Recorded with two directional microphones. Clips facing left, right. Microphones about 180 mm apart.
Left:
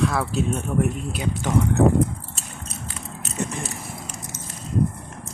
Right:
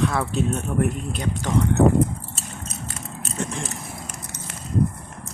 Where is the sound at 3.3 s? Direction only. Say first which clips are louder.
Left 1 dB; 10° left (ahead or behind).